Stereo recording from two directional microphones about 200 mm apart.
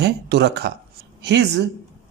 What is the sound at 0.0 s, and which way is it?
Speech, 55° right (ahead or behind).